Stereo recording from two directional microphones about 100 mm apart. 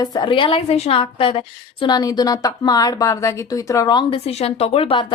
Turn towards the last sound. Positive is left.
turn(degrees=85)